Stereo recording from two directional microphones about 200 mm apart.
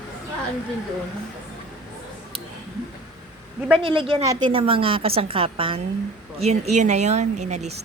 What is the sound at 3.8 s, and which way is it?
A woman's voice, 25° right (ahead or behind).